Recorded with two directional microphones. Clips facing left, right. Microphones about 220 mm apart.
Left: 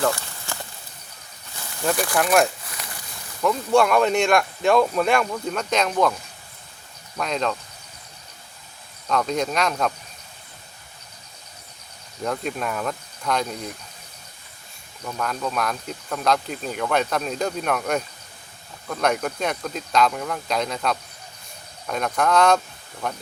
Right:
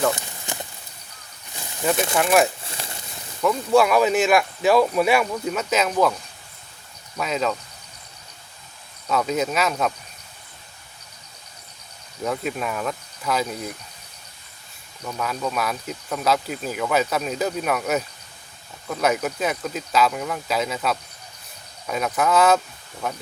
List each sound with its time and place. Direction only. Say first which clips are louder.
0.1 s a sound: right 1 dB; 20° right (ahead or behind)
2.1 s speech: even; 5° right (ahead or behind)
2.6 s a sound: right 2 dB; 30° right (ahead or behind)
3.4 s speech: right 1 dB; 5° right (ahead or behind)
7.2 s speech: right 1 dB; 5° right (ahead or behind)
9.0 s speech: right 1 dB; 5° right (ahead or behind)
12.2 s speech: right 1 dB; 5° right (ahead or behind)
15.0 s speech: right 1 dB; 5° right (ahead or behind)